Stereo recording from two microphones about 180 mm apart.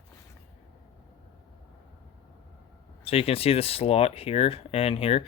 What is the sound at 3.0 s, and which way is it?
Speech, 35° left (ahead or behind).